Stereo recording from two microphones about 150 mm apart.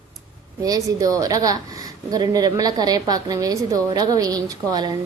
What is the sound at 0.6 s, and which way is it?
A woman's voice, 25° right (ahead or behind).